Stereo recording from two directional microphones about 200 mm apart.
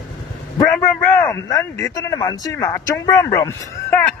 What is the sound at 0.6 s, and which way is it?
A man's voice, 15° left (ahead or behind).